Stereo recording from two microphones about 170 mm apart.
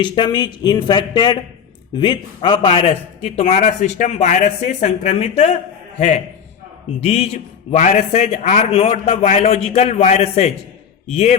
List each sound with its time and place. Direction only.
0.0 s a man's voice: 25° left (ahead or behind)
7.0 s a man's voice: 35° left (ahead or behind)